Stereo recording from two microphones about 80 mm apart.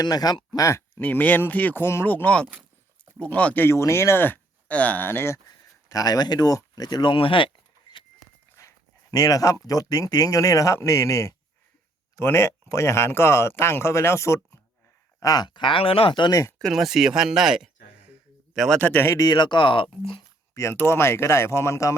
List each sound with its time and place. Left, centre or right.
0.0 s speech: left
0.5 s speech: left
1.0 s speech: left
2.0 s speech: centre
3.8 s speech: left
5.5 s speech: left
8.5 s dog: left
9.6 s speech: left
15.2 s speech: left
15.4 s speech: left
16.7 s speech: centre
18.8 s speech: left
19.2 s speech: left
20.5 s speech: left